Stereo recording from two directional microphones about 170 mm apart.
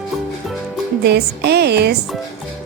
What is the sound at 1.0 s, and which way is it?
Speech, 75° right (ahead or behind).